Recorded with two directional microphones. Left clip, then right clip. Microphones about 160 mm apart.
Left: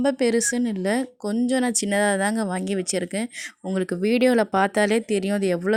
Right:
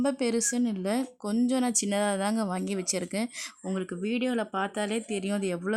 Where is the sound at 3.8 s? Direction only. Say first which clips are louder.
Left 11 dB; 30° left (ahead or behind).